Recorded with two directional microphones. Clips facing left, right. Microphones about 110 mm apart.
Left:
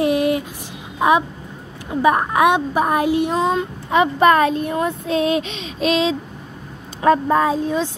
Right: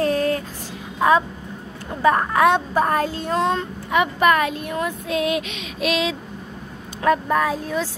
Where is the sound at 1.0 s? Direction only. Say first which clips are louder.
Left 1 dB; 20° left (ahead or behind).